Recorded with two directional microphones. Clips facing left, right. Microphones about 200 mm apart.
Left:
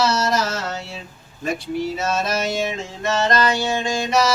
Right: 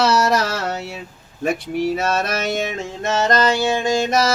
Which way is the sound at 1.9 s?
60° right (ahead or behind).